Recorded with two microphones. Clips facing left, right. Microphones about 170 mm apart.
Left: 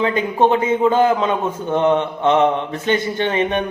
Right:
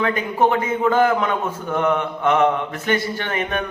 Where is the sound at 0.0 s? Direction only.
20° left (ahead or behind).